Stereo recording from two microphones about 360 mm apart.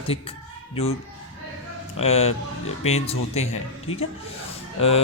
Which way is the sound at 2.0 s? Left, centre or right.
Centre.